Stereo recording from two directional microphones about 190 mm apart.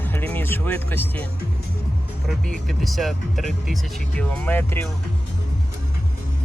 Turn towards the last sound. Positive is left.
turn(degrees=10)  # may be behind; listen again after turning